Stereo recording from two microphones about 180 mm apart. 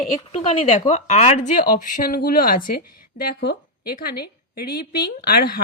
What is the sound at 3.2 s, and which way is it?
A woman's voice, 65° left (ahead or behind).